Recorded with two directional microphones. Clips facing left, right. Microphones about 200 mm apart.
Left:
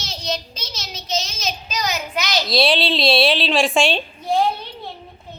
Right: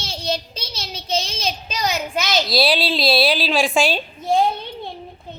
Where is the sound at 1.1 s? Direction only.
30° right (ahead or behind).